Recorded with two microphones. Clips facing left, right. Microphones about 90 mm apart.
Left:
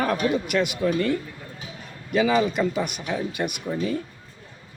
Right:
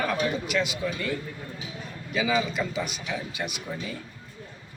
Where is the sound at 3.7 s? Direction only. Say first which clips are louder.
Left 7 dB; 20° left (ahead or behind).